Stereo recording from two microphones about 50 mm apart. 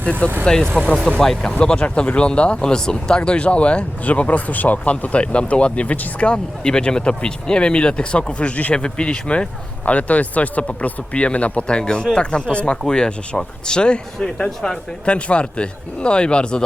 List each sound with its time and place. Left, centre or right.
0.0 s speech: left